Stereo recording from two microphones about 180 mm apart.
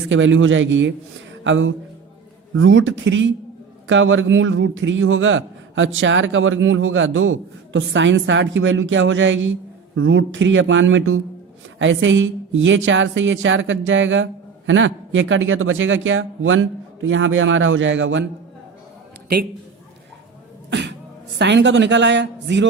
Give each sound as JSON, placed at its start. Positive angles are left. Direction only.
{"t": 0.1, "sound": "a man's voice", "side_deg": -90}
{"t": 20.7, "sound": "a woman's voice", "side_deg": -75}